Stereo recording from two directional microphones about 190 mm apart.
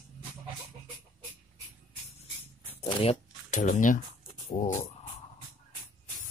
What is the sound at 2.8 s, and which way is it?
Shuffling cards, 30° left (ahead or behind).